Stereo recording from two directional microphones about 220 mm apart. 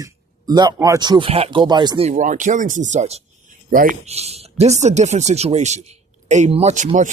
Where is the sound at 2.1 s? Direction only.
35° right (ahead or behind).